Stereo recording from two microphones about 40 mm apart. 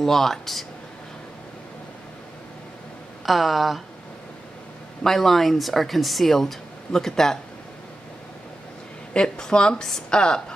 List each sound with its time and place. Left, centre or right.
0.0 s speech: centre
3.3 s speech: centre
5.0 s speech: centre
9.1 s speech: left